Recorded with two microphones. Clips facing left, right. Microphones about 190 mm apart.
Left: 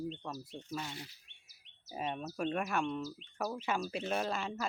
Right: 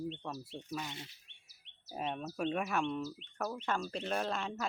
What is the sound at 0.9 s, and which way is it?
Speech, 20° right (ahead or behind).